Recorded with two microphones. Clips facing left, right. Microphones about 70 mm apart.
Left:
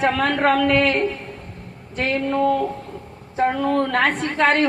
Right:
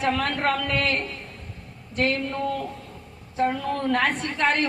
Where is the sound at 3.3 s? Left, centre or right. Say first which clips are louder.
Left 6 dB; left.